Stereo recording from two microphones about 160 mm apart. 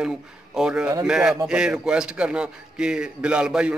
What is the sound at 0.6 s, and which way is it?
A man's voice, 5° right (ahead or behind).